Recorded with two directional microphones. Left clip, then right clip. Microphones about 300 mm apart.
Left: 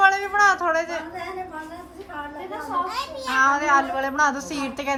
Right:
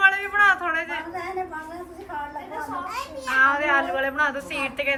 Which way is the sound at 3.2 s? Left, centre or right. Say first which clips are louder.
Even; centre.